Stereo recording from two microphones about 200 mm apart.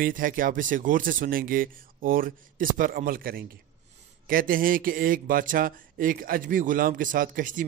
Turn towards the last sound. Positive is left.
turn(degrees=-40)  # may be behind; listen again after turning